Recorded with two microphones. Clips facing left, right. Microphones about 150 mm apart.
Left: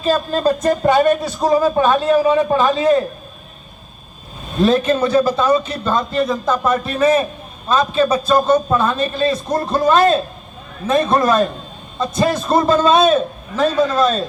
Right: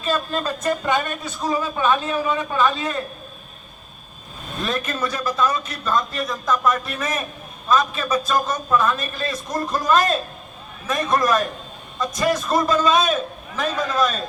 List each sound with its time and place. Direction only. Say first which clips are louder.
0.0 s a man's voice: left 7 dB; 35° left (ahead or behind)
4.6 s a man's voice: left 11 dB; 30° left (ahead or behind)